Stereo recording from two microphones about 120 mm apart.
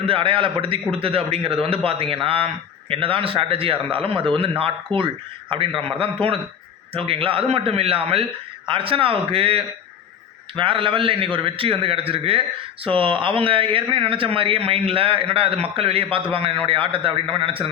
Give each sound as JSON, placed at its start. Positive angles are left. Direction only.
{"t": 0.0, "sound": "speech", "side_deg": -50}